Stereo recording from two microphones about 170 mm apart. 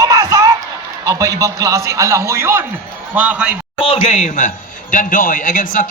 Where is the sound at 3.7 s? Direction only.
35° left (ahead or behind).